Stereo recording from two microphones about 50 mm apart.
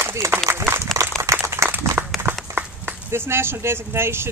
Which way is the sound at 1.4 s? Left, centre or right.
Right.